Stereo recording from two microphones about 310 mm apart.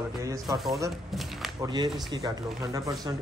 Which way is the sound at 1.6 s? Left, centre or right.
Centre.